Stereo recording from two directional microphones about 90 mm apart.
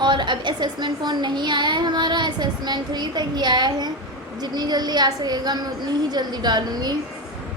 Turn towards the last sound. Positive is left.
turn(degrees=-50)  # may be behind; listen again after turning